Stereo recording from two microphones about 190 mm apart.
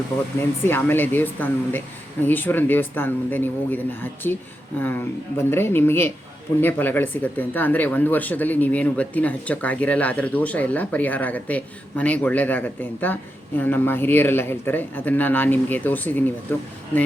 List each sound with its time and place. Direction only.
0.3 s speech: 10° left (ahead or behind)